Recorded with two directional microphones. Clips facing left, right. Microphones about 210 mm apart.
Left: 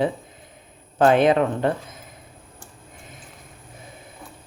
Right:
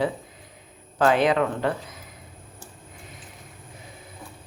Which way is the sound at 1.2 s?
25° left (ahead or behind).